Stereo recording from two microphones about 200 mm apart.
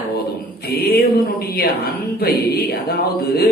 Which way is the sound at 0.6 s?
50° left (ahead or behind).